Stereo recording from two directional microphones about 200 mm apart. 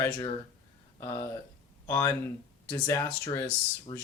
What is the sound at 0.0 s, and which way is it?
Speech, 20° left (ahead or behind).